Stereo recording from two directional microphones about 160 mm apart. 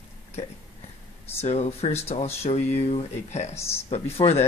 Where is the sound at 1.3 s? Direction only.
40° left (ahead or behind).